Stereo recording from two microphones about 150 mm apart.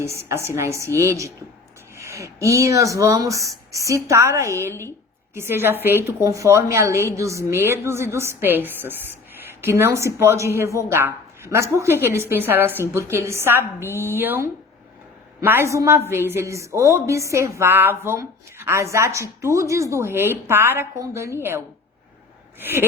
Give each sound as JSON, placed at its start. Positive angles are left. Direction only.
{"t": 0.0, "sound": "a woman's voice", "side_deg": -15}
{"t": 22.6, "sound": "a woman's voice", "side_deg": -15}